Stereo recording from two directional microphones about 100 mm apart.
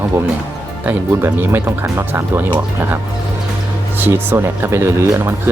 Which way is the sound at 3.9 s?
20° right (ahead or behind).